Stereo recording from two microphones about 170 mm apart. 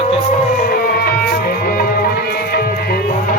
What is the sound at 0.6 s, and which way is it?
Music, 60° left (ahead or behind).